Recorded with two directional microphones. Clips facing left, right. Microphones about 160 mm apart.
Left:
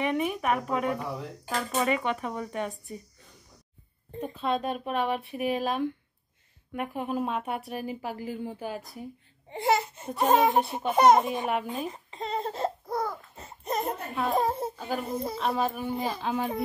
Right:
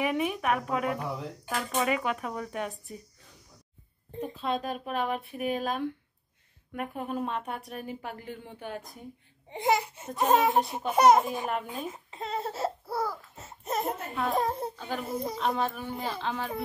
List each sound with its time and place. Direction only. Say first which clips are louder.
0.0 s a child's voice: left 1 dB; centre (ahead or behind)
9.5 s speech: left 1 dB; 15° right (ahead or behind)
10.0 s a child's voice: left 2 dB; 5° left (ahead or behind)